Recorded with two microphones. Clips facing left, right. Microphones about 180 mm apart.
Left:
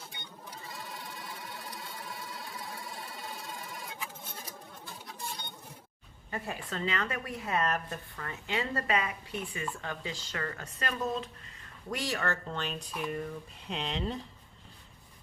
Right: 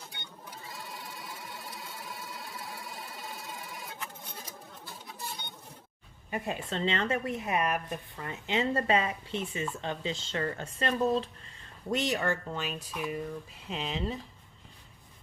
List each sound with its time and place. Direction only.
0.1 s sewing machine: centre (ahead or behind)
4.9 s cash register: 5° right (ahead or behind)
6.3 s a woman's voice: 20° right (ahead or behind)
11.9 s speech: 20° right (ahead or behind); by 14.2 s centre (ahead or behind)